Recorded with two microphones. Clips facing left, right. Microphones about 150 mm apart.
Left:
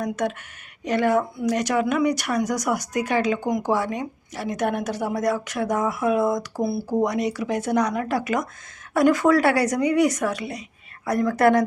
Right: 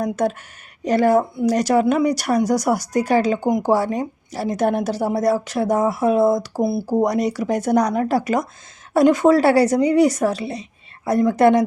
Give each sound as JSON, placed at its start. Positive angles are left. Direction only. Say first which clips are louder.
{"t": 0.0, "sound": "a woman's voice", "louder": "right 5 dB", "side_deg": -35}
{"t": 6.8, "sound": "a woman's voice", "louder": "right 3 dB", "side_deg": -35}